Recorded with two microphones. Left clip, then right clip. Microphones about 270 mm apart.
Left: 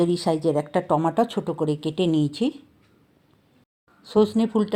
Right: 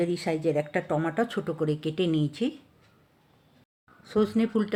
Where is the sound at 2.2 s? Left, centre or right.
Centre.